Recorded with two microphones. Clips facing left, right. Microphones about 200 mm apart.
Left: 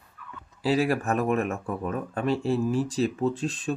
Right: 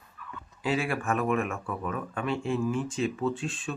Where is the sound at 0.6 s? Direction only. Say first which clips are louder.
Left 5 dB; 35° left (ahead or behind).